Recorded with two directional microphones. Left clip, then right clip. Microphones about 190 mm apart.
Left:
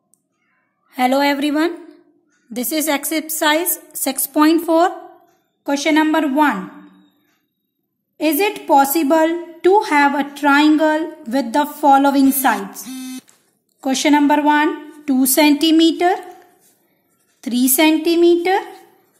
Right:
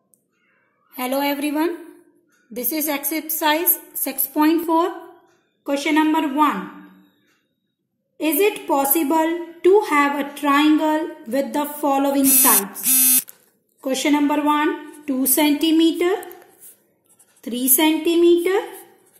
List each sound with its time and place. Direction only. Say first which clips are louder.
0.8 s a woman's voice: left 7 dB; 45° left (ahead or behind)
8.2 s a woman's voice: left 2 dB; 50° left (ahead or behind)
13.7 s a woman's voice: left 4 dB; 50° left (ahead or behind)
17.4 s a woman's voice: left 5 dB; 50° left (ahead or behind)